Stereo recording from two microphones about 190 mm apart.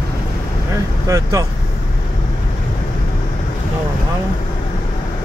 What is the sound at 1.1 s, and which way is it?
Speech, 15° right (ahead or behind).